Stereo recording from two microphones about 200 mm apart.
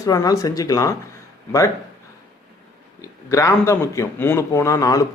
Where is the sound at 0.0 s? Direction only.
15° left (ahead or behind).